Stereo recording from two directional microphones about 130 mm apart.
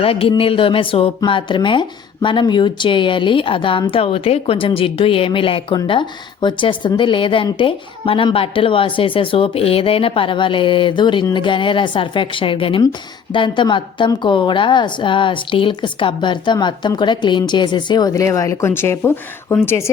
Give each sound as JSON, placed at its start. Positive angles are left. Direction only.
{"t": 0.0, "sound": "a woman's voice", "side_deg": 45}